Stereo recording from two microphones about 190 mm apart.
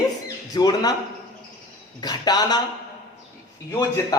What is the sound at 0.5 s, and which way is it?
Speech, 20° left (ahead or behind).